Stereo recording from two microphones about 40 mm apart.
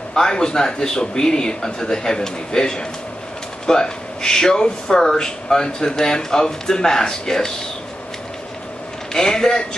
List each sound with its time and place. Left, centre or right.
0.1 s speech: centre
9.1 s speech: centre